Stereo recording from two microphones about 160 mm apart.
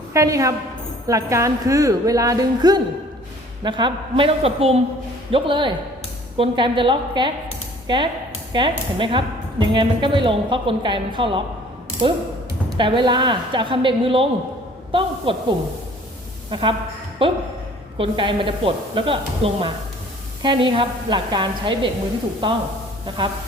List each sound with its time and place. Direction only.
0.1 s a woman's voice: 20° right (ahead or behind)
23.0 s a woman's voice: 30° right (ahead or behind)